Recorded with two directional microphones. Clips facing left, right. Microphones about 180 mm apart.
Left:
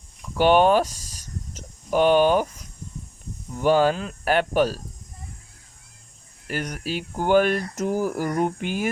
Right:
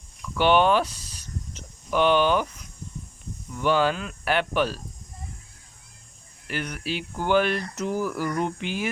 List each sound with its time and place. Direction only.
0.2 s a sound: 40° left (ahead or behind)
3.5 s speech: 40° left (ahead or behind)
6.5 s speech: 40° left (ahead or behind)